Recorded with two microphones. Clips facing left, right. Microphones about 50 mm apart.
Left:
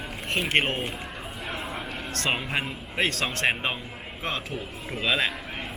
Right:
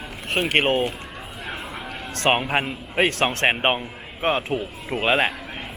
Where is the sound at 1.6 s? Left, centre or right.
Centre.